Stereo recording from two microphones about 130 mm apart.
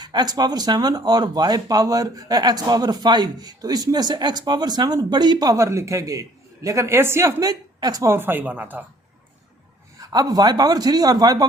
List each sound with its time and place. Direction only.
0.0 s a man's voice: 30° right (ahead or behind); by 8.8 s 15° right (ahead or behind)
10.0 s a man's voice: 30° right (ahead or behind)